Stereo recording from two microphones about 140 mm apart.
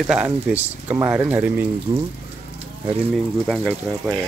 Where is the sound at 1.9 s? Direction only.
30° right (ahead or behind).